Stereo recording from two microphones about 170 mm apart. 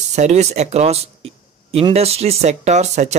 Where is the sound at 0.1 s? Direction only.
40° right (ahead or behind).